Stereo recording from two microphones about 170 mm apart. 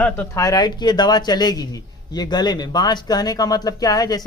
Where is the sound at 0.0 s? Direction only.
15° left (ahead or behind).